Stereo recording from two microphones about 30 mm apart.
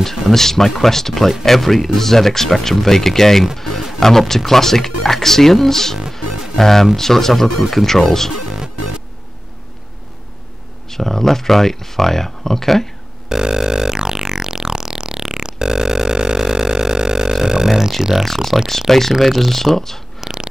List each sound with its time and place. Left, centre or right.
0.3 s speech: centre
6.2 s music: centre
6.6 s speech: centre
8.5 s music: right
10.9 s speech: centre
13.3 s music: right
18.1 s speech: centre
20.2 s chewing: centre